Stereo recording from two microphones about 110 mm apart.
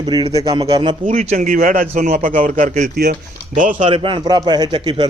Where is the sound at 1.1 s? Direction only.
75° right (ahead or behind).